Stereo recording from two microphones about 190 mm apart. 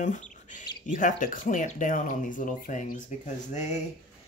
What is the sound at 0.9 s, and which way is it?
Speech, 45° left (ahead or behind).